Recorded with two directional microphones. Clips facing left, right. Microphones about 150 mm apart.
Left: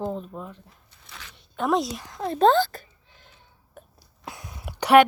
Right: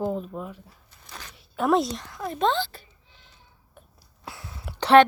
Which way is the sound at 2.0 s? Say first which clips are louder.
Left 5 dB; 25° left (ahead or behind).